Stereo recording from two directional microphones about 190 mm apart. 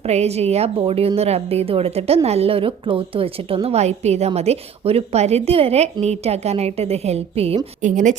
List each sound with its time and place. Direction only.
0.1 s a woman's voice: 35° right (ahead or behind)